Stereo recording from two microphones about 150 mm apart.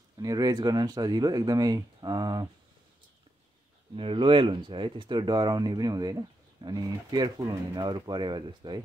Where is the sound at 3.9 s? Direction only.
35° right (ahead or behind).